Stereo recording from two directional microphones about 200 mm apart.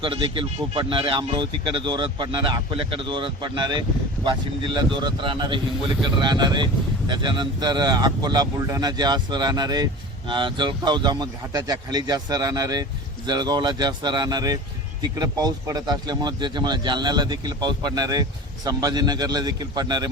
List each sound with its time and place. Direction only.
0.0 s a man's voice: 25° right (ahead or behind)